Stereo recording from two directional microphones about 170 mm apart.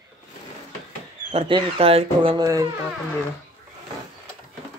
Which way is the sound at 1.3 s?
35° right (ahead or behind).